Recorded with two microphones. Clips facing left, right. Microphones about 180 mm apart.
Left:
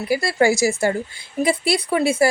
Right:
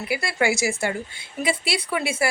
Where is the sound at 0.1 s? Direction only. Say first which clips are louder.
Left 6 dB; 40° left (ahead or behind).